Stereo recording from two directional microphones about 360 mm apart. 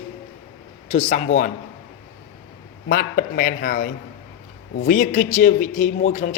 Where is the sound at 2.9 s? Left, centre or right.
Left.